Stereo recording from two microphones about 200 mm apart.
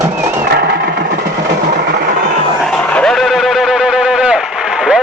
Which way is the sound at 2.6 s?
5° left (ahead or behind).